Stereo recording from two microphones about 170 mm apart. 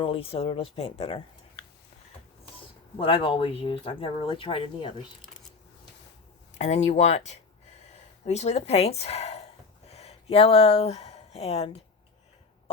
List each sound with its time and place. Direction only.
0.0 s speech: 35° left (ahead or behind)
3.0 s speech: 30° left (ahead or behind)
6.6 s speech: 40° left (ahead or behind)
8.2 s speech: 40° left (ahead or behind)